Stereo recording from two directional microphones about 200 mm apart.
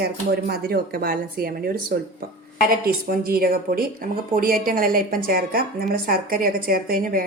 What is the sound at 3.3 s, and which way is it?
Speech, 50° right (ahead or behind).